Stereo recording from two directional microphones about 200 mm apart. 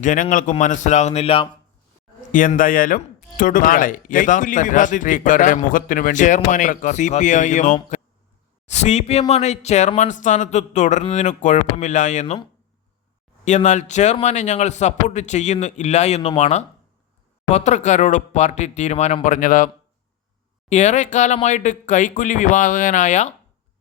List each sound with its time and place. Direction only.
0.0 s speech: 40° left (ahead or behind)
2.3 s speech: 40° left (ahead or behind)
13.4 s speech: 35° left (ahead or behind)